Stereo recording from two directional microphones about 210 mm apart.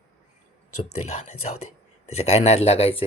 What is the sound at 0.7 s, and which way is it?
Speech, 90° left.